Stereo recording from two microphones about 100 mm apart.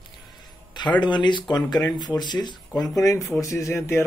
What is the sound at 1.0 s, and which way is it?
Speech, 50° left (ahead or behind).